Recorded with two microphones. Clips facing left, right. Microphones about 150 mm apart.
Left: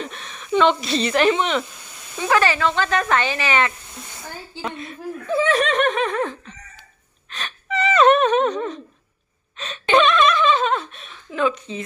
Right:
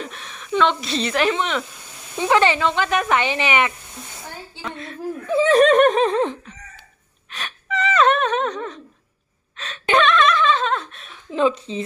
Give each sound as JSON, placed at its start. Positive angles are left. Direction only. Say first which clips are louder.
{"t": 0.0, "sound": "speech", "louder": "left 1 dB", "side_deg": -5}
{"t": 2.1, "sound": "speech", "louder": "right 2 dB", "side_deg": -20}
{"t": 5.5, "sound": "laughter", "louder": "right 9 dB", "side_deg": -45}
{"t": 7.3, "sound": "gasp", "louder": "left 1 dB", "side_deg": -10}
{"t": 7.8, "sound": "a sound", "louder": "left 3 dB", "side_deg": 5}
{"t": 11.3, "sound": "speech", "louder": "right 2 dB", "side_deg": -30}